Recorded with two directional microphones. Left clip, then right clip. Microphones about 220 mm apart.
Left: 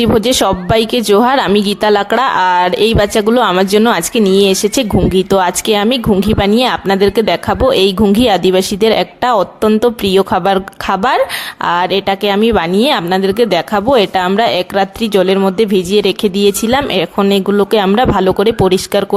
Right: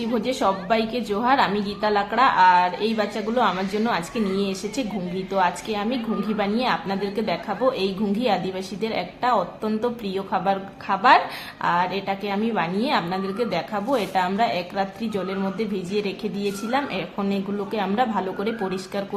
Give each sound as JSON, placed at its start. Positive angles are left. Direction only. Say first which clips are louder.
{"t": 0.0, "sound": "a woman's voice", "louder": "left 12 dB", "side_deg": 50}